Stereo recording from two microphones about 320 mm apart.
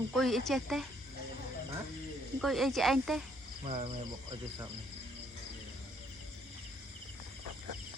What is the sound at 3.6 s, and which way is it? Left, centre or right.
Speech, centre.